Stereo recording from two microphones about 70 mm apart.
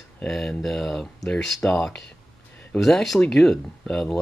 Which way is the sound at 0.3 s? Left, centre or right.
Centre.